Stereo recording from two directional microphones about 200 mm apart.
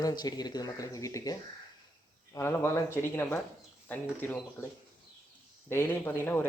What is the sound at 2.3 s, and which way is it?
Speech, 15° left (ahead or behind).